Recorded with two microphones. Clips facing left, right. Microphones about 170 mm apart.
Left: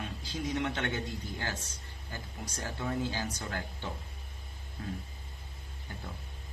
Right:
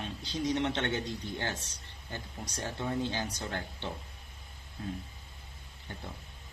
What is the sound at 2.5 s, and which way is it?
Speech, 30° right (ahead or behind).